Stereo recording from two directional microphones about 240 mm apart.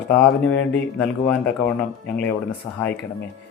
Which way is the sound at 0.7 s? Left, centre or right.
Centre.